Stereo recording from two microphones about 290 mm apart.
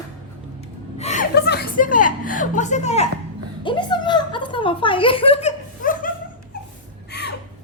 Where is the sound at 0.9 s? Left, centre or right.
Left.